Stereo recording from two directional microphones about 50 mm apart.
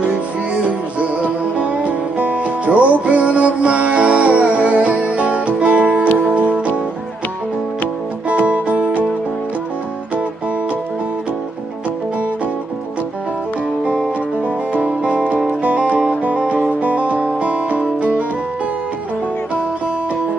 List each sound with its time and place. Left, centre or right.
0.7 s music: right
8.3 s music: right
14.7 s music: right